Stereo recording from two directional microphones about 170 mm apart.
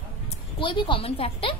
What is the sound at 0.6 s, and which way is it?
Speech, 30° left (ahead or behind).